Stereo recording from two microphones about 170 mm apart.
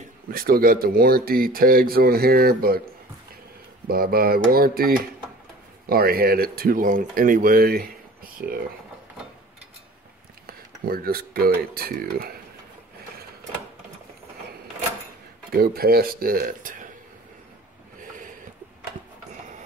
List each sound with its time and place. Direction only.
0.0 s speech: 60° right (ahead or behind)
3.8 s speech: 60° right (ahead or behind)
10.4 s speech: 60° right (ahead or behind)
15.5 s speech: 65° right (ahead or behind)